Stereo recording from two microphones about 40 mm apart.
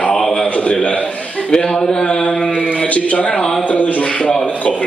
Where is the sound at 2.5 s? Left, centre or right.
Right.